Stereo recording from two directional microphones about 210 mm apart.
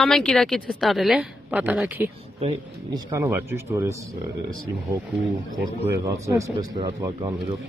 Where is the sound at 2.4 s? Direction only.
20° right (ahead or behind).